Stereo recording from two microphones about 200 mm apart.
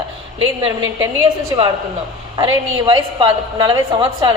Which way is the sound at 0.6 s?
20° right (ahead or behind).